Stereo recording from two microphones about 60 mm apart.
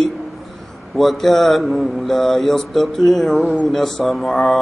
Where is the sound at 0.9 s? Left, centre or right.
Centre.